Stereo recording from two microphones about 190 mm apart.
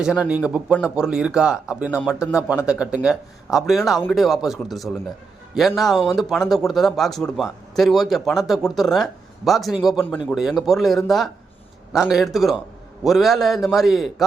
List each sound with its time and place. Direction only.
0.0 s speech: 5° right (ahead or behind)